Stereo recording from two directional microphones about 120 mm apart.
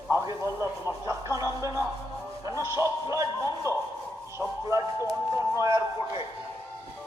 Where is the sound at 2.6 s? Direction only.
25° right (ahead or behind).